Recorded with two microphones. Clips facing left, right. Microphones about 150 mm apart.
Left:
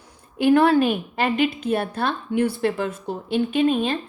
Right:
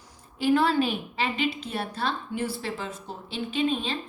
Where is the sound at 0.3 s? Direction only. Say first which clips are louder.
Left 6 dB; 55° left (ahead or behind).